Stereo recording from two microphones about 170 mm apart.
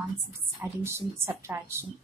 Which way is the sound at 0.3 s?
15° right (ahead or behind).